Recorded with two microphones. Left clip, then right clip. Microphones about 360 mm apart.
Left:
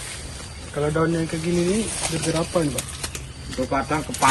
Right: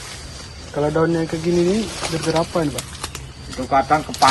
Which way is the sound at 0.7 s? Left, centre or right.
Centre.